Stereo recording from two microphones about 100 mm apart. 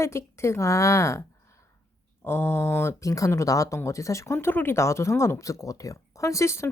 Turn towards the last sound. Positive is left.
turn(degrees=30)  # may be behind; listen again after turning